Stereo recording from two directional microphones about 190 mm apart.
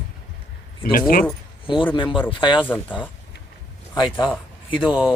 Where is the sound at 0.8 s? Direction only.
50° left (ahead or behind).